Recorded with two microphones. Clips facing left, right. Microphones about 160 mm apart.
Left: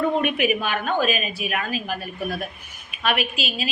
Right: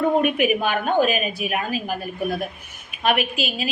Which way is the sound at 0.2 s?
50° right (ahead or behind).